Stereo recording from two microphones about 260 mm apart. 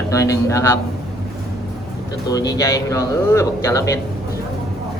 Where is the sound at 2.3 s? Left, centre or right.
Centre.